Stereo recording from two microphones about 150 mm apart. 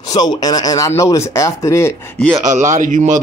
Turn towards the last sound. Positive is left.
turn(degrees=-55)  # may be behind; listen again after turning